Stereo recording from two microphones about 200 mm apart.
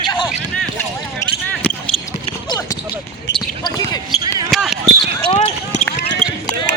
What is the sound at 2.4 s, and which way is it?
Basketball bounce, 20° left (ahead or behind).